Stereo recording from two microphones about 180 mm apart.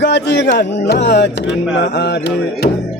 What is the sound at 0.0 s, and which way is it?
Music, 75° left (ahead or behind).